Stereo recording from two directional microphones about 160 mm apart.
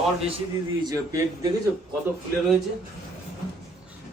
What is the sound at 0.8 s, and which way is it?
Speech, 20° right (ahead or behind).